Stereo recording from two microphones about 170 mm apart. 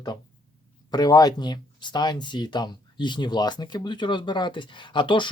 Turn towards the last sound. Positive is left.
turn(degrees=30)  # may be behind; listen again after turning